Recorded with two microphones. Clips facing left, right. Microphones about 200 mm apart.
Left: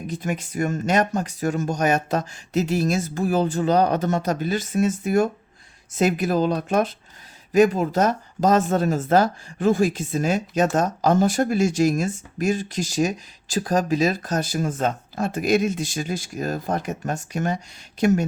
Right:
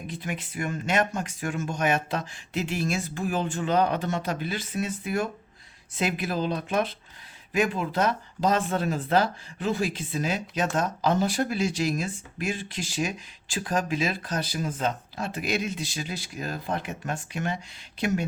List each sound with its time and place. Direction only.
0.1 s speech: 45° left (ahead or behind)